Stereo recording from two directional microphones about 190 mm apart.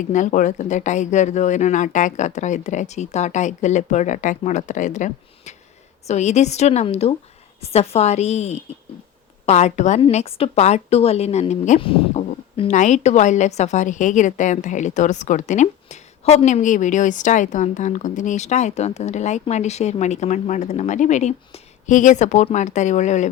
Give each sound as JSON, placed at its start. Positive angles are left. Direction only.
{"t": 0.0, "sound": "speech", "side_deg": 40}